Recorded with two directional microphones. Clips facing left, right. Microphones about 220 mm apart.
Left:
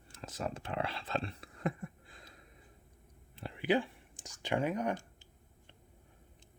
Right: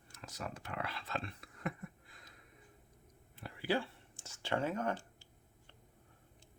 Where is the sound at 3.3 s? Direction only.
25° left (ahead or behind).